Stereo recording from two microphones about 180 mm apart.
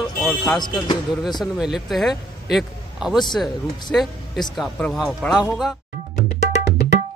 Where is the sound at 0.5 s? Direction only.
25° left (ahead or behind).